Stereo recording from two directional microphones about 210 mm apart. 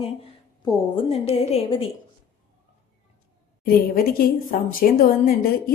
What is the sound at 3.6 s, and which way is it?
Speech, 45° left (ahead or behind).